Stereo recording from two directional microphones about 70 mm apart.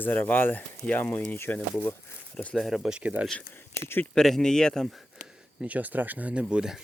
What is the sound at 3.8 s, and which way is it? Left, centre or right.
Speech, left.